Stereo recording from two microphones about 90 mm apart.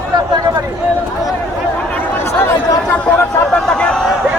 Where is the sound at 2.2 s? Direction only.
30° left (ahead or behind).